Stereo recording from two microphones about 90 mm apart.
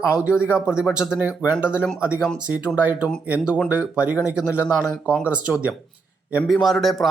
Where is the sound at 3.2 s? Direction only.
15° right (ahead or behind).